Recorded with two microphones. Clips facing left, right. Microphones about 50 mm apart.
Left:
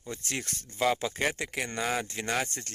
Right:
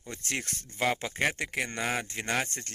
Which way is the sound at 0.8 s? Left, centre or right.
Right.